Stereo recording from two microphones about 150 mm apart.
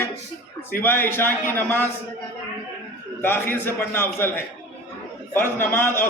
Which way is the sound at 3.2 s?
15° left (ahead or behind).